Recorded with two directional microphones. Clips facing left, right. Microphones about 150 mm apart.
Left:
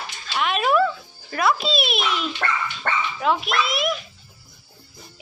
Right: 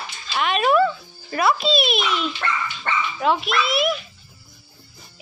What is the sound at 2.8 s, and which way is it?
Dog, 50° left (ahead or behind).